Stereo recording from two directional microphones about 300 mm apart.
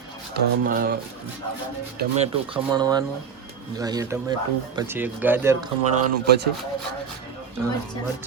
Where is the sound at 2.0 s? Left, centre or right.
Right.